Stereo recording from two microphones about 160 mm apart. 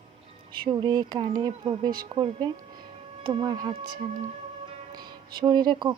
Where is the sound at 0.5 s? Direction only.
30° right (ahead or behind).